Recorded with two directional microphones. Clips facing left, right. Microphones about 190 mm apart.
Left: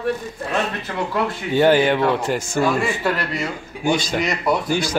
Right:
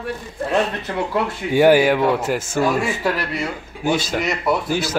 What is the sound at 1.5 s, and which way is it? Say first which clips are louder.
A man's voice: right 2 dB; 10° right (ahead or behind).